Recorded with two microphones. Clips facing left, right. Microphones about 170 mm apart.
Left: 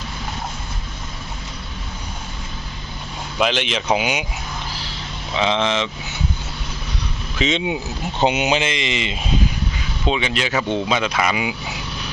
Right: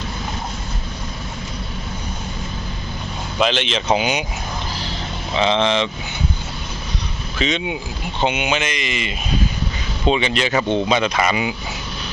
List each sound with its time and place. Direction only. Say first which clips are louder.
3.3 s speech: right 1 dB; 10° left (ahead or behind)
5.4 s speech: right 2 dB; 5° left (ahead or behind)
7.3 s speech: left 1 dB; 25° left (ahead or behind)
8.2 s speech: left 2 dB; 35° left (ahead or behind); by 9.1 s 20° left (ahead or behind)
10.1 s speech: right 3 dB; centre (ahead or behind)